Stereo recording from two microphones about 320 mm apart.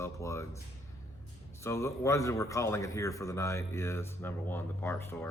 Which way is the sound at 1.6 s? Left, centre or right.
Centre.